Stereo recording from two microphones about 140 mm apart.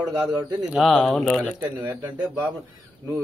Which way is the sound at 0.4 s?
25° right (ahead or behind).